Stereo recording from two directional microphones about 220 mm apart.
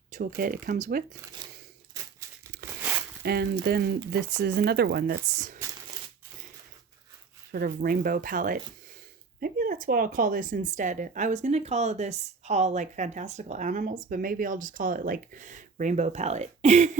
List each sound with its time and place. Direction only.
0.1 s a woman's voice: 40° right (ahead or behind)
1.4 s tearing: 20° right (ahead or behind)
3.2 s speech: 45° right (ahead or behind)
7.5 s a woman's voice: 40° right (ahead or behind)